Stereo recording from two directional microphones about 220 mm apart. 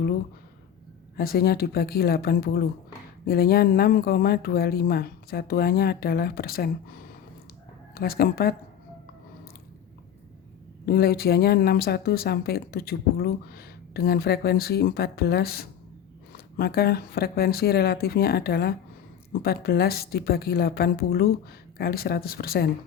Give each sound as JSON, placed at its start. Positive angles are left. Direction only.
{"t": 1.1, "sound": "speech", "side_deg": 45}
{"t": 10.8, "sound": "speech", "side_deg": 45}